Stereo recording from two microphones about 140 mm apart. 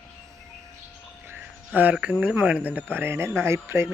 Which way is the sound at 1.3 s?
10° right (ahead or behind).